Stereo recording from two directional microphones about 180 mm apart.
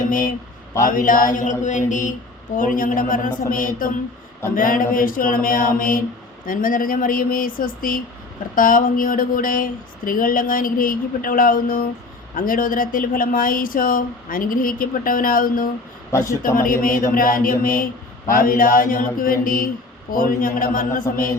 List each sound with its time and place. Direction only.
0.1 s speech: 50° left (ahead or behind)
16.1 s a man's voice: 15° left (ahead or behind)
16.6 s speech: 50° left (ahead or behind)